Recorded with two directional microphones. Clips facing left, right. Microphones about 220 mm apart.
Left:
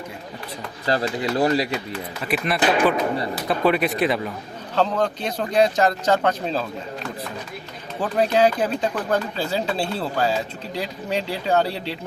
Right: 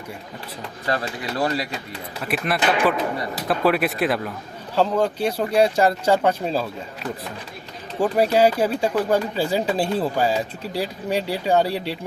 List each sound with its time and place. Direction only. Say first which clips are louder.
0.9 s speech: left 4 dB; 25° left (ahead or behind)
2.2 s speech: left 1 dB; centre (ahead or behind)
8.0 s speech: right 1 dB; 10° right (ahead or behind)